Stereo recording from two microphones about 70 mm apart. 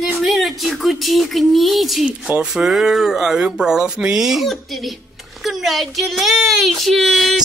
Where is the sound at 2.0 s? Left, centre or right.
Centre.